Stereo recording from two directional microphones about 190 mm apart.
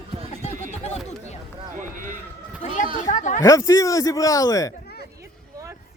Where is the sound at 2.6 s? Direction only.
35° left (ahead or behind).